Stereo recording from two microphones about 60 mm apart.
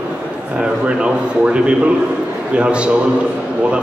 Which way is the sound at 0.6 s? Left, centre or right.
Centre.